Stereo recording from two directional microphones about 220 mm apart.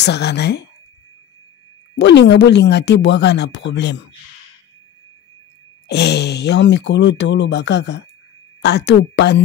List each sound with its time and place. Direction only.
0.0 s speech: 50° left (ahead or behind)
2.0 s speech: 50° left (ahead or behind)
5.9 s speech: 50° left (ahead or behind)